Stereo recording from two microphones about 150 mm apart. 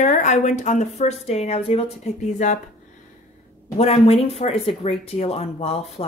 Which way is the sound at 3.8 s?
45° left (ahead or behind).